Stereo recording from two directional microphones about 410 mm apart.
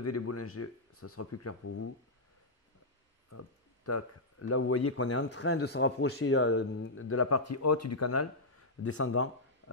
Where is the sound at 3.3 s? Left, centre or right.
Left.